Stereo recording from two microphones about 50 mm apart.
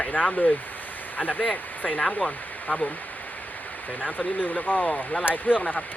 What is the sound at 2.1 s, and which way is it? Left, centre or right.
Speech, left.